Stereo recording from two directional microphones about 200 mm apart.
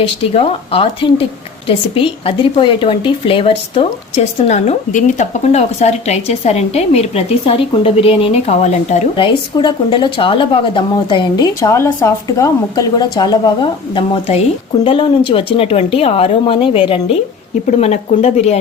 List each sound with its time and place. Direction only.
0.0 s a woman's voice: 30° left (ahead or behind)